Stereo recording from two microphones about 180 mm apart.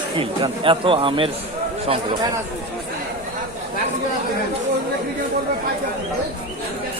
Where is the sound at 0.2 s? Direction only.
30° right (ahead or behind).